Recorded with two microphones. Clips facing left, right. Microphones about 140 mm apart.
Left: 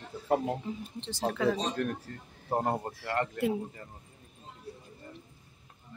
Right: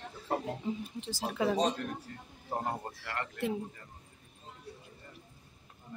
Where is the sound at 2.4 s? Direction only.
45° left (ahead or behind).